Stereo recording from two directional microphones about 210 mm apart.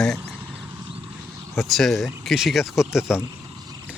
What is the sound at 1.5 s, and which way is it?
Speech, centre (ahead or behind).